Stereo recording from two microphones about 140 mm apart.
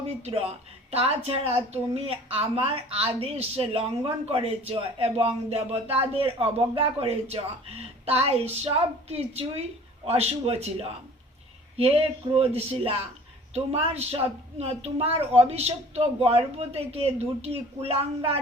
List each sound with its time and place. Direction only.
0.0 s a woman's voice: 45° right (ahead or behind)
12.4 s a woman's voice: 45° right (ahead or behind)